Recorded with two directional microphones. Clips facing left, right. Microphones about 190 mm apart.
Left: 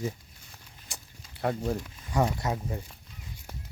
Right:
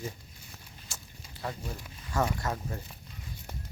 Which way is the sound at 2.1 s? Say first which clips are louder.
Left 3 dB; 20° left (ahead or behind).